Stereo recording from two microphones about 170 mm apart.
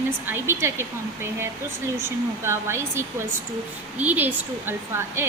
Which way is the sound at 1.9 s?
15° right (ahead or behind).